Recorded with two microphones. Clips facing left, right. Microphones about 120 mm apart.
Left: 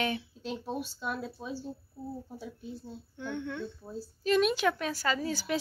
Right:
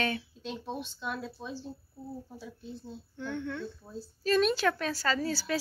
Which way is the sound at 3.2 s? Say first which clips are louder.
Even; 15° left (ahead or behind).